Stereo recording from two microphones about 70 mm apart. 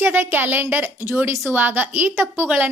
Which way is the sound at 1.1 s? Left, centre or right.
Right.